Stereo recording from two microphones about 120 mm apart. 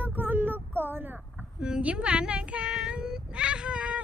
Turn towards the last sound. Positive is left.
turn(degrees=-10)  # may be behind; listen again after turning